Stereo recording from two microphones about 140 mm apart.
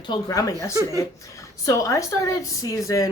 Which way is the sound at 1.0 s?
20° left (ahead or behind).